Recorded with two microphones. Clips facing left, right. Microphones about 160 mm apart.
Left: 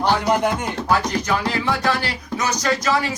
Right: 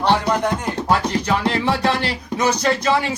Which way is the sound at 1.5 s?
25° right (ahead or behind).